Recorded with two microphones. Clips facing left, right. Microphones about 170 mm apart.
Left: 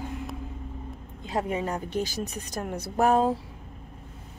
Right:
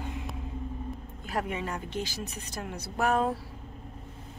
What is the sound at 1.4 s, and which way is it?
Speech, 35° left (ahead or behind).